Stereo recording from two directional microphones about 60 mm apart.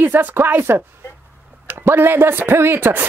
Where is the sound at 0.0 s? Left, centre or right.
Right.